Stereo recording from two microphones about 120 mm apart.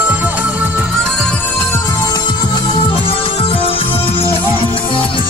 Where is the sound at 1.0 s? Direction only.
5° left (ahead or behind).